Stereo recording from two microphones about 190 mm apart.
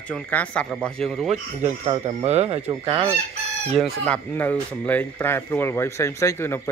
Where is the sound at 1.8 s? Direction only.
30° right (ahead or behind).